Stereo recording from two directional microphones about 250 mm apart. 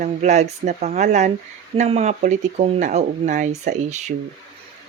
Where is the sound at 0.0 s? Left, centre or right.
Right.